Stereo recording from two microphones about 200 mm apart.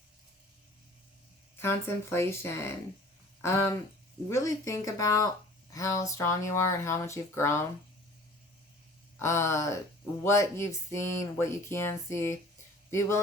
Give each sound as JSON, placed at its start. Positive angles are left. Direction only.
{"t": 1.5, "sound": "speech", "side_deg": 10}
{"t": 9.1, "sound": "speech", "side_deg": 15}